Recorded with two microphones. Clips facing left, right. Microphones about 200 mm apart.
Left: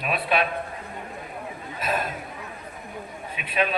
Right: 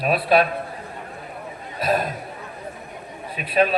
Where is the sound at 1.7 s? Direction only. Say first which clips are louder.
Right 6 dB; 35° right (ahead or behind).